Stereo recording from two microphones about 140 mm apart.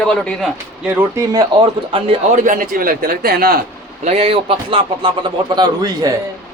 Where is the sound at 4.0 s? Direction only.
50° right (ahead or behind); by 6.1 s 25° right (ahead or behind).